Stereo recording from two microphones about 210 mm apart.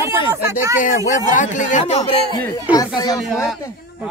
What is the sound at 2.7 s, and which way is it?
Speech, 20° left (ahead or behind).